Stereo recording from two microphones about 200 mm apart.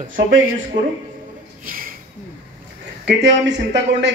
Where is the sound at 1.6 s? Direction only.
45° right (ahead or behind).